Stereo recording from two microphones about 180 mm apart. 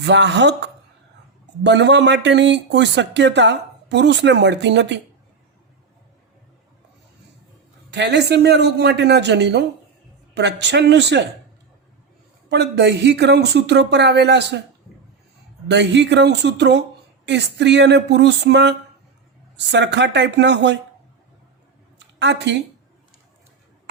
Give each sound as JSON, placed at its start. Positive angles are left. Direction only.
{"t": 0.0, "sound": "speech", "side_deg": -75}
{"t": 7.9, "sound": "speech", "side_deg": -70}
{"t": 12.5, "sound": "speech", "side_deg": -65}
{"t": 15.6, "sound": "speech", "side_deg": -75}
{"t": 21.9, "sound": "a sound", "side_deg": -75}